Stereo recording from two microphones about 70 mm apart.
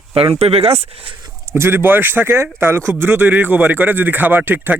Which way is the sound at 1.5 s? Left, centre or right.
Right.